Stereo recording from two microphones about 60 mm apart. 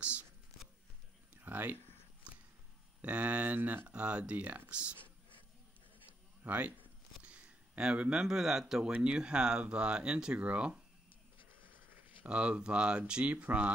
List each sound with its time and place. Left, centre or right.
0.0 s whispering: right
1.3 s a sound: right
3.0 s speech: right
6.4 s speech: right
7.2 s speech: centre
11.6 s a sound: right
12.3 s speech: centre